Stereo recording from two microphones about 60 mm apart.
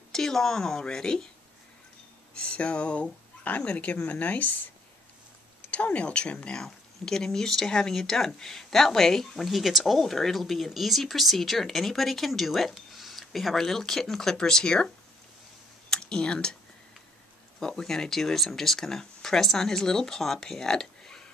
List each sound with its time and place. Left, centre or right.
0.1 s speech: centre
2.4 s speech: centre
5.7 s speech: left
15.9 s speech: centre
17.6 s speech: centre